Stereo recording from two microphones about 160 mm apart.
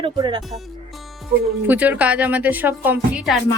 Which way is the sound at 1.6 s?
10° right (ahead or behind).